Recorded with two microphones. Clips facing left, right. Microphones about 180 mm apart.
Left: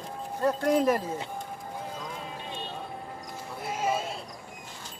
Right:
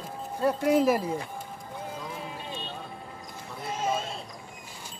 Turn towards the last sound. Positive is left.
turn(degrees=10)  # may be behind; listen again after turning